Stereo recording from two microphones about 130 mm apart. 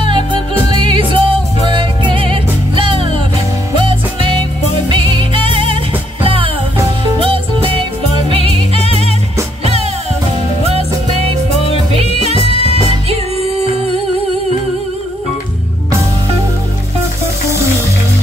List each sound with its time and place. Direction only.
0.7 s music: 40° right (ahead or behind)
4.8 s music: 40° right (ahead or behind)
11.5 s music: 50° left (ahead or behind)
12.0 s music: 50° right (ahead or behind)